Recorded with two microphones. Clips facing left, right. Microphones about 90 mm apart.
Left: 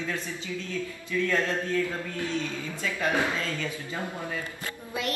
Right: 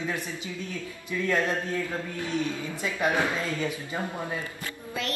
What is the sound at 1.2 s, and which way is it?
A man's voice, 15° right (ahead or behind).